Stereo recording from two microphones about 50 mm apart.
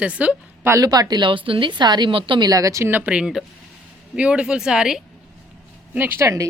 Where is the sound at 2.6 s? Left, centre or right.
Right.